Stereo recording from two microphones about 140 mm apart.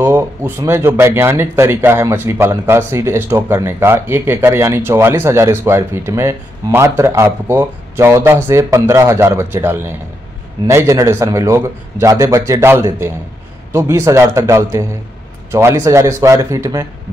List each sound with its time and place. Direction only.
0.0 s a man's voice: 20° right (ahead or behind)